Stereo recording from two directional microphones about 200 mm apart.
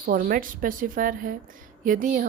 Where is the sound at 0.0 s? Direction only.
45° right (ahead or behind).